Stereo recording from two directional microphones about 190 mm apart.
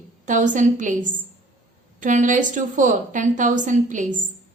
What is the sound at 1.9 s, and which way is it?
A woman's voice, 40° right (ahead or behind).